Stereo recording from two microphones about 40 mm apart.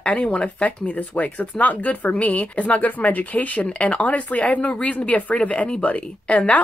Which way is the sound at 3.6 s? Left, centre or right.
Left.